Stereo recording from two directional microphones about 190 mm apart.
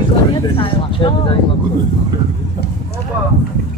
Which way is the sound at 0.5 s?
30° left (ahead or behind).